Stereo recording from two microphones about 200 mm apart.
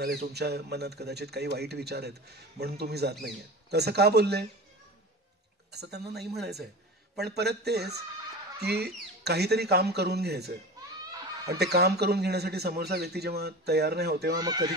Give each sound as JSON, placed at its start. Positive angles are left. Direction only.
{"t": 0.0, "sound": "speech", "side_deg": -55}
{"t": 5.7, "sound": "speech", "side_deg": -55}
{"t": 14.3, "sound": "speech", "side_deg": -20}